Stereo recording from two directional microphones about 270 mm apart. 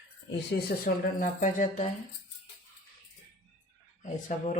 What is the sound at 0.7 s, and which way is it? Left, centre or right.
Speech, left.